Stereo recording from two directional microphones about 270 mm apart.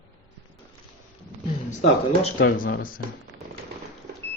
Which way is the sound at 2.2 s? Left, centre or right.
Left.